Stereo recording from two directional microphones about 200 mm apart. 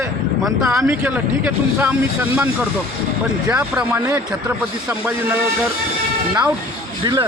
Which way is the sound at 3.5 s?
5° right (ahead or behind).